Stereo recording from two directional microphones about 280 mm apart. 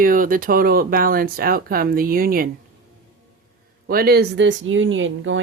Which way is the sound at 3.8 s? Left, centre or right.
Right.